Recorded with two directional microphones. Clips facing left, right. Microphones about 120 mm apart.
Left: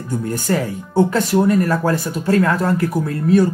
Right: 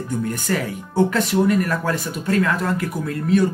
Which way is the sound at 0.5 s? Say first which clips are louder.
Left 7 dB; 35° left (ahead or behind).